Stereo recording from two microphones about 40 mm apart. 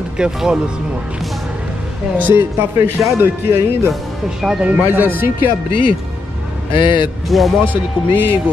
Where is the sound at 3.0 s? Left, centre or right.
Right.